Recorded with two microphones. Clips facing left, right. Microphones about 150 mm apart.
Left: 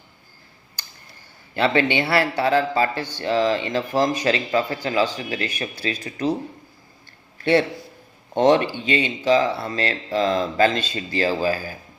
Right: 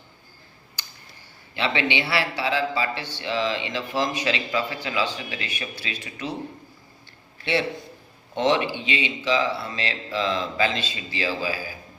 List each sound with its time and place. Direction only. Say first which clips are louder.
1.5 s a man's voice: left 5 dB; 45° left (ahead or behind)
8.4 s a man's voice: left 5 dB; 45° left (ahead or behind)